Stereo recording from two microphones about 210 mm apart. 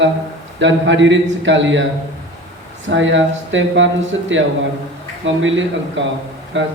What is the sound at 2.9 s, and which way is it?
Speech, 60° right (ahead or behind).